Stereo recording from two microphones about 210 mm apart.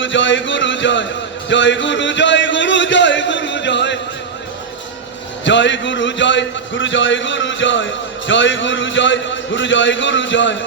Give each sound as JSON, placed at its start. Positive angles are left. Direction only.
{"t": 0.0, "sound": "speech", "side_deg": 60}
{"t": 1.5, "sound": "a sound", "side_deg": 60}
{"t": 5.5, "sound": "speech", "side_deg": 60}